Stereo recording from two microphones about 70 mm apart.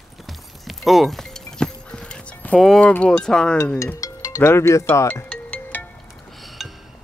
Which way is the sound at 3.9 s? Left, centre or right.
Left.